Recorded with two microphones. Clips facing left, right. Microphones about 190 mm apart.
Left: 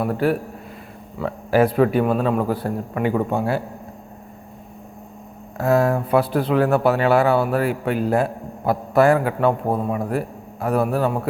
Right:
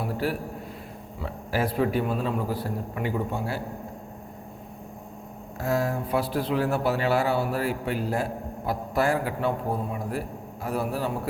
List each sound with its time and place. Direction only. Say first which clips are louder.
0.0 s speech: left 8 dB; 60° left (ahead or behind)
5.5 s speech: left 8 dB; 60° left (ahead or behind)